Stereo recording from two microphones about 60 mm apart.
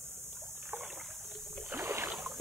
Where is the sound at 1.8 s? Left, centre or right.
Right.